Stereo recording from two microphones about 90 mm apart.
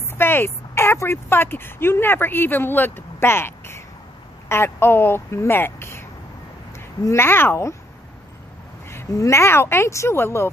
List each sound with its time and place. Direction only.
0.1 s speech: 25° left (ahead or behind)
7.1 s speech: 25° left (ahead or behind)
8.9 s speech: 30° left (ahead or behind)